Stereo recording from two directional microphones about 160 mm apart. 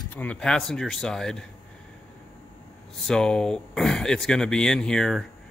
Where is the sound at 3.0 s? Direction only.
5° left (ahead or behind).